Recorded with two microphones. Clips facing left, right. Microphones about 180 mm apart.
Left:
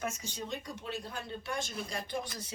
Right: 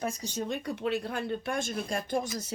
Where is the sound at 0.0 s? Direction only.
35° right (ahead or behind).